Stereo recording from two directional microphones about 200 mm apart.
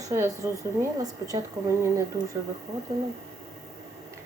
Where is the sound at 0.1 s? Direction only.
15° right (ahead or behind).